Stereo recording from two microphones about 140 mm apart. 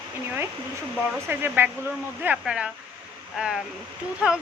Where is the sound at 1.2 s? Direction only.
15° right (ahead or behind).